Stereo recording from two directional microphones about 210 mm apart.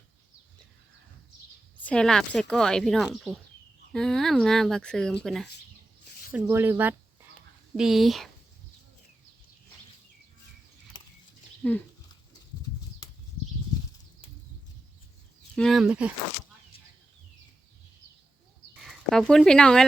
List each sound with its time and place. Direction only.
1.8 s a woman's voice: 5° left (ahead or behind)
6.3 s a woman's voice: 10° right (ahead or behind)
11.6 s speech: 5° left (ahead or behind)
15.5 s a woman's voice: centre (ahead or behind)
18.8 s speech: centre (ahead or behind)